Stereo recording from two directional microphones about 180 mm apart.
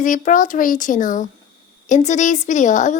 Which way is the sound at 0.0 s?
45° left (ahead or behind).